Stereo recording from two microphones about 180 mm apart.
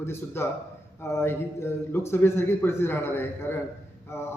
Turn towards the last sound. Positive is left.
turn(degrees=15)  # may be behind; listen again after turning